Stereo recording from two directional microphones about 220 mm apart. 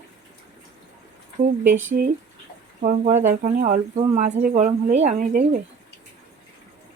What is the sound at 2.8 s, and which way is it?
Speech, 35° right (ahead or behind).